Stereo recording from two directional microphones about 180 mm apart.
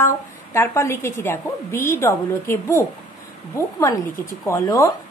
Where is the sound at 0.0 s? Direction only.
15° left (ahead or behind).